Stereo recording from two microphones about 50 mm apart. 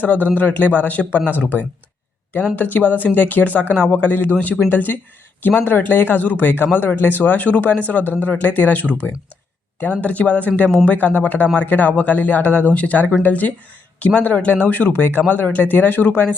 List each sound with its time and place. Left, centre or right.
0.0 s speech: left